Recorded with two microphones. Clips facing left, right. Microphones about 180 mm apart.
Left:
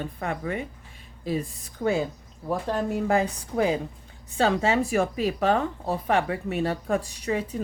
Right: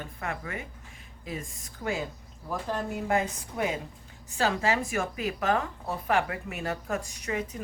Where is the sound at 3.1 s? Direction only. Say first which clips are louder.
Left 4 dB; 30° left (ahead or behind).